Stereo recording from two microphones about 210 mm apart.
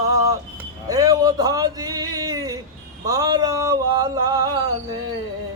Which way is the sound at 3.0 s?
15° right (ahead or behind).